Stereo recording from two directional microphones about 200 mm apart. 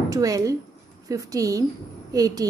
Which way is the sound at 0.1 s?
15° right (ahead or behind).